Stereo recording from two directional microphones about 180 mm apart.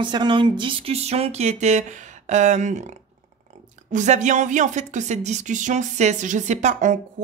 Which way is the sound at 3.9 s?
40° right (ahead or behind).